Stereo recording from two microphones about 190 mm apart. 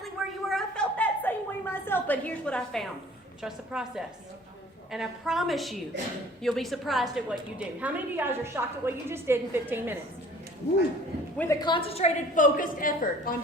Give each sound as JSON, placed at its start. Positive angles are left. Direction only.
{"t": 0.0, "sound": "a sound", "side_deg": 0}
{"t": 3.4, "sound": "a woman's voice", "side_deg": -5}
{"t": 11.3, "sound": "a woman's voice", "side_deg": 15}
{"t": 11.7, "sound": "a woman's voice", "side_deg": 30}